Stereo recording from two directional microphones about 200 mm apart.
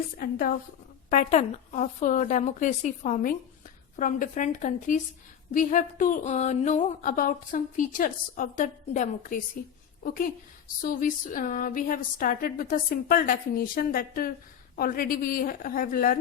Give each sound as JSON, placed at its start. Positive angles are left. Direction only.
{"t": 0.2, "sound": "a woman's voice", "side_deg": 45}
{"t": 10.8, "sound": "a woman's voice", "side_deg": 40}